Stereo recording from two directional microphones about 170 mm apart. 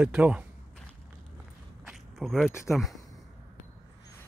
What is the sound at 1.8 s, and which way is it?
Biting, centre (ahead or behind).